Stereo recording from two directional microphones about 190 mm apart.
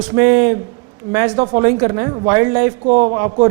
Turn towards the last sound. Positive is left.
turn(degrees=-15)  # may be behind; listen again after turning